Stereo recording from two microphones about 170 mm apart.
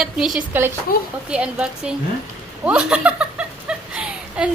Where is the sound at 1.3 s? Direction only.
5° right (ahead or behind).